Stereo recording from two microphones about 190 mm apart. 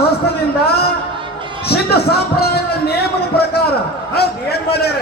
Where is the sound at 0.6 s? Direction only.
55° left (ahead or behind).